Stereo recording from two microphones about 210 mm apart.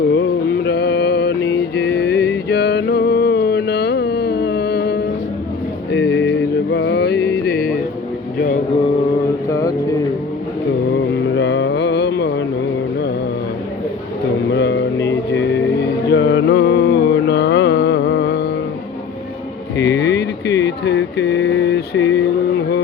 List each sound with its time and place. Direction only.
0.1 s mantra: 55° left (ahead or behind)
5.9 s music: 55° left (ahead or behind)
9.5 s music: 15° left (ahead or behind)
11.3 s mantra: 55° left (ahead or behind)
14.5 s mantra: 55° left (ahead or behind)
19.7 s a sound: 55° left (ahead or behind)